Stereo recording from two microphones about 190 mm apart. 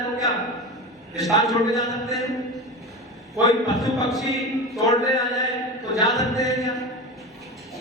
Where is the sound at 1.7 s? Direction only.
Centre (ahead or behind).